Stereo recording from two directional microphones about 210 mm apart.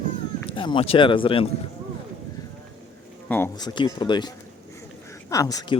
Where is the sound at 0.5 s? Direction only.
25° left (ahead or behind).